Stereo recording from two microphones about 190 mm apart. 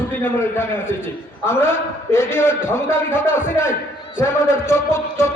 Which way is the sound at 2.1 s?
15° left (ahead or behind).